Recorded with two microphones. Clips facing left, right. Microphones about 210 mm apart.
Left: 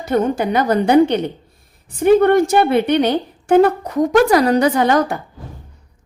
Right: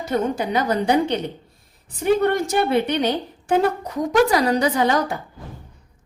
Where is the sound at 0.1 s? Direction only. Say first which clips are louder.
Left 5 dB; 55° left (ahead or behind).